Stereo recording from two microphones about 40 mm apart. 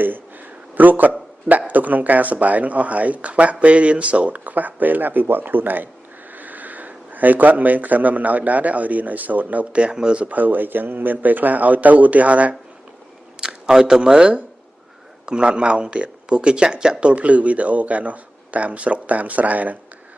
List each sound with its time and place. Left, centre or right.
0.0 s a sound: right
1.7 s speech: right
9.8 s speech: right
10.2 s a man's voice: right
13.4 s speech: centre
17.1 s speech: right